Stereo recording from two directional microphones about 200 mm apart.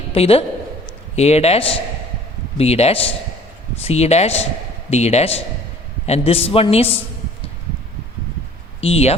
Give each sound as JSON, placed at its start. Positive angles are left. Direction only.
{"t": 0.1, "sound": "a man's voice", "side_deg": 30}
{"t": 8.8, "sound": "a man's voice", "side_deg": 30}